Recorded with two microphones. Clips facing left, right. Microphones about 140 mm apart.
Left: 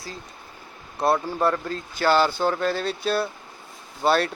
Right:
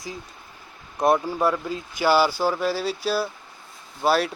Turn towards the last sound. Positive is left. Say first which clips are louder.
# even
turn(degrees=-5)  # may be behind; listen again after turning